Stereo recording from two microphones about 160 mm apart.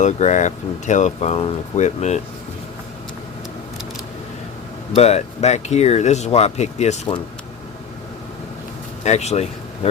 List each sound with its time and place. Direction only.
0.0 s speech: 45° left (ahead or behind)
4.9 s speech: 40° left (ahead or behind)
9.0 s speech: 45° left (ahead or behind)